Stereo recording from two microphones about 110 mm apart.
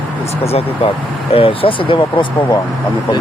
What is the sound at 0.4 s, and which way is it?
Speech, 65° left (ahead or behind).